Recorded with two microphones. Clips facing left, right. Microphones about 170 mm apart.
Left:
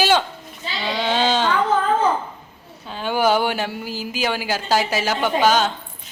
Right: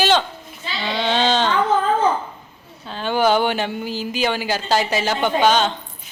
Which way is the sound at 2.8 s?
10° left (ahead or behind).